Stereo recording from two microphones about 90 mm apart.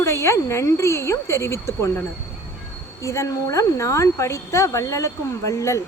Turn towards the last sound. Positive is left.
turn(degrees=35)  # may be behind; listen again after turning